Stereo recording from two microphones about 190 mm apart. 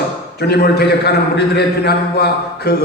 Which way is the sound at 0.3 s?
55° left (ahead or behind).